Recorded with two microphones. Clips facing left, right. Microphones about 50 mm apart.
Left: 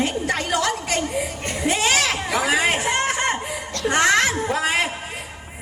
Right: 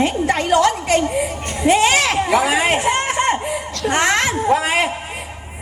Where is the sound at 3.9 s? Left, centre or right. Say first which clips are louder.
Right 1 dB; right.